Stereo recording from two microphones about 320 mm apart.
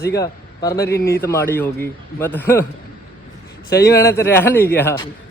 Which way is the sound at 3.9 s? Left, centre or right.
Centre.